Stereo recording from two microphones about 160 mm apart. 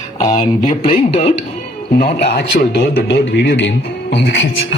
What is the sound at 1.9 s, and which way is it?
A man's voice, 70° left (ahead or behind).